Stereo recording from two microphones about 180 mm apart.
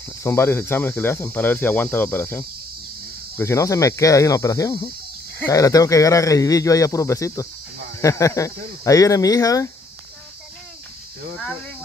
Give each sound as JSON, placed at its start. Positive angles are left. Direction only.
{"t": 0.2, "sound": "speech", "side_deg": 15}